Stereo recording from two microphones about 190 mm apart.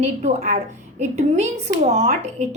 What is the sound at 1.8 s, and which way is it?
Speech, 40° right (ahead or behind).